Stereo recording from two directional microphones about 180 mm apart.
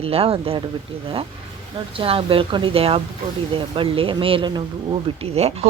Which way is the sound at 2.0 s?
30° right (ahead or behind).